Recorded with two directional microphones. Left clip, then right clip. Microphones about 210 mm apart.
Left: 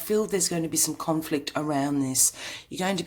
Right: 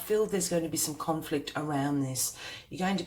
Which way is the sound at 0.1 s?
50° left (ahead or behind).